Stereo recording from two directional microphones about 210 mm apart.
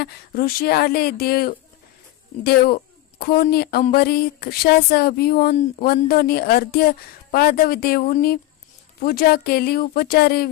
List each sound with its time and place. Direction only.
0.0 s speech: 45° left (ahead or behind)